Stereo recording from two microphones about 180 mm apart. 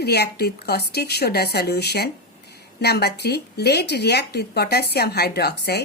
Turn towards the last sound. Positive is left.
turn(degrees=60)  # may be behind; listen again after turning